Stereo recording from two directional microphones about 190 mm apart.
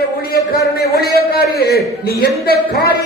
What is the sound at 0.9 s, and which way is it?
A man's voice, 55° left (ahead or behind).